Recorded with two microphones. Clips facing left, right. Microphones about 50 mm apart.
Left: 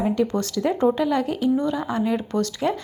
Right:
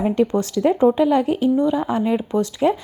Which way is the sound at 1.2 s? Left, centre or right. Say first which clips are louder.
Right 5 dB; right.